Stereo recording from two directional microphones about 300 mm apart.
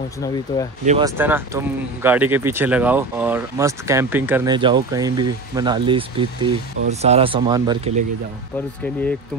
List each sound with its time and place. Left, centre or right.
0.5 s speech: centre
0.8 s speech: centre